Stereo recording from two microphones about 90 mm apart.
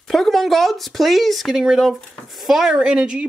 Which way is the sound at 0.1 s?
Centre (ahead or behind).